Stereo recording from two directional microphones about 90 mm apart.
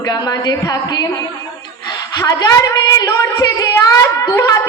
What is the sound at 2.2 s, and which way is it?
A woman's voice, 45° left (ahead or behind).